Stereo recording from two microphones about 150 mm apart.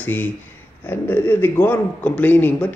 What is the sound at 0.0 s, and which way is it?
A man's voice, 10° left (ahead or behind).